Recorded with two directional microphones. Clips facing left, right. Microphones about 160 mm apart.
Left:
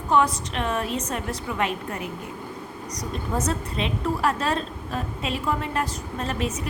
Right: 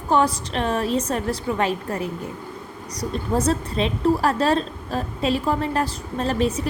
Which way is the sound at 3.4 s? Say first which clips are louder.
Right 5 dB; 35° right (ahead or behind).